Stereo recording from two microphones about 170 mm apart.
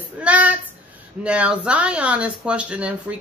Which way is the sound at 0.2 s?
10° right (ahead or behind).